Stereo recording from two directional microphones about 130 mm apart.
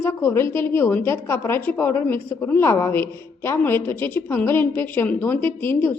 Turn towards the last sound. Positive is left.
turn(degrees=15)  # may be behind; listen again after turning